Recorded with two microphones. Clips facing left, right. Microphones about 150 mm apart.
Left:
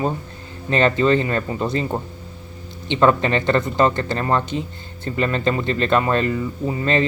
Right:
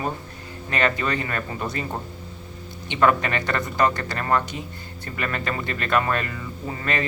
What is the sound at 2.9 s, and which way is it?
Speech, 25° left (ahead or behind).